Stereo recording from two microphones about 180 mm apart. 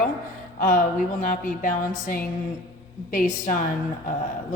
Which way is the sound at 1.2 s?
45° left (ahead or behind).